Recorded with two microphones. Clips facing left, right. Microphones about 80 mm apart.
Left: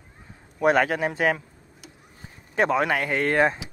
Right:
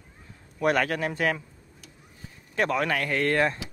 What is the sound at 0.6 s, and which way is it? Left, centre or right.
Speech, centre.